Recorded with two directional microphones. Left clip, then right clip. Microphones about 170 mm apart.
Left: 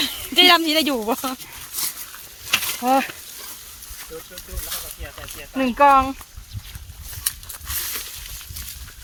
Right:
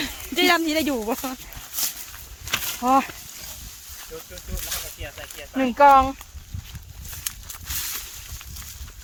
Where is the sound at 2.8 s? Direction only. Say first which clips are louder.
Even; 70° right (ahead or behind).